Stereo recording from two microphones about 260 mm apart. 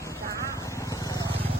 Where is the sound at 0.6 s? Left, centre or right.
Centre.